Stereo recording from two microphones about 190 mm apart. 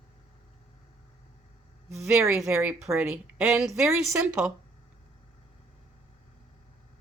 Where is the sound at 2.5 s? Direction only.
5° right (ahead or behind).